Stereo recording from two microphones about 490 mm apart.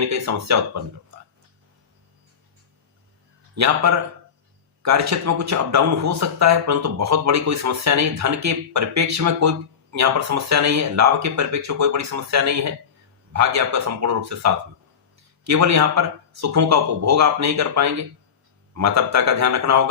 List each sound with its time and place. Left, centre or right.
0.1 s speech: right
3.5 s speech: right